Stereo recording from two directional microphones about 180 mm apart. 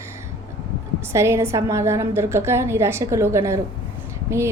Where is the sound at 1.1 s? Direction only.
15° right (ahead or behind).